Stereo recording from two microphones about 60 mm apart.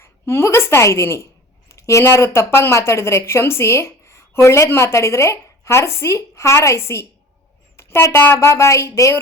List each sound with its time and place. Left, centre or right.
0.0 s a woman's voice: left
7.8 s a sound: left
8.2 s speech: left
8.4 s speech: left